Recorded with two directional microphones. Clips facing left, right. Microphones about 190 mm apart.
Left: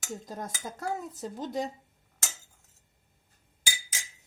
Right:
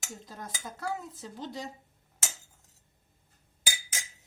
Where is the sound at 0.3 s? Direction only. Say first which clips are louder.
Left 4 dB; 45° left (ahead or behind).